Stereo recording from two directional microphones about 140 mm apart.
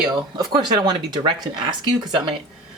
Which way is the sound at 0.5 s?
35° right (ahead or behind).